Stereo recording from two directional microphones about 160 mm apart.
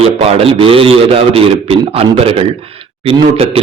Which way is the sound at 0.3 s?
35° right (ahead or behind).